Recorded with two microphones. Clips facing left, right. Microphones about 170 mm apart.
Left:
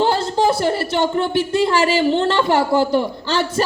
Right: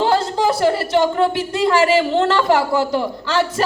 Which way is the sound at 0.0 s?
30° left (ahead or behind).